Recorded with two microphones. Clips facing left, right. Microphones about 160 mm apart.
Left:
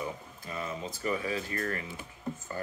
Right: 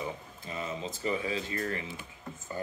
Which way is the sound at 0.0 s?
20° right (ahead or behind).